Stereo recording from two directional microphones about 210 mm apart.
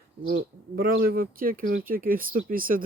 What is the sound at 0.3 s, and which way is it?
Speech, 45° right (ahead or behind).